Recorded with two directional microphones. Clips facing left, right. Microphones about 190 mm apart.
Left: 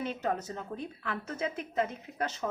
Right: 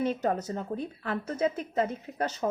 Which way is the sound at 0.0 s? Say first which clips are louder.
Right 5 dB; 40° right (ahead or behind).